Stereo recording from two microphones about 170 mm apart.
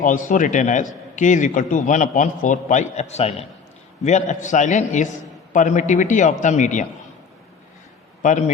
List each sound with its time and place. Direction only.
0.0 s a man's voice: 50° left (ahead or behind)
8.2 s a man's voice: 45° left (ahead or behind)